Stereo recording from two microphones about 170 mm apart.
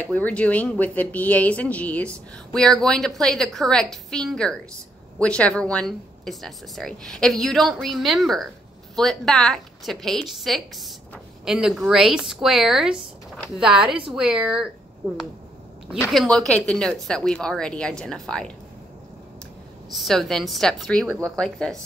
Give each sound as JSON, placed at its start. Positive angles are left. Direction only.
{"t": 0.0, "sound": "speech", "side_deg": 10}
{"t": 15.0, "sound": "speech", "side_deg": -20}
{"t": 16.0, "sound": "speech", "side_deg": 5}
{"t": 19.9, "sound": "speech", "side_deg": 0}